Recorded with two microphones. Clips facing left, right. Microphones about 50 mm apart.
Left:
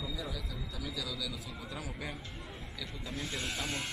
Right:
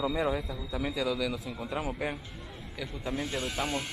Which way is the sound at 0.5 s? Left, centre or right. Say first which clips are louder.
Right 8 dB; right.